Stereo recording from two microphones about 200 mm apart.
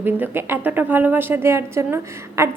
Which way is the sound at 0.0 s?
10° right (ahead or behind).